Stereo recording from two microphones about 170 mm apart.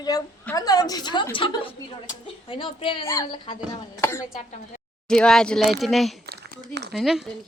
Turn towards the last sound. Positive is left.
turn(degrees=0)  # may be behind; listen again after turning